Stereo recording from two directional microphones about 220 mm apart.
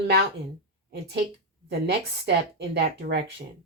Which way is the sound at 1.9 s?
50° right (ahead or behind).